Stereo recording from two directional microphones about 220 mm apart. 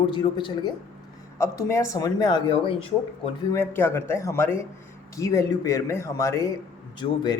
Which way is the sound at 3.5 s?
10° left (ahead or behind).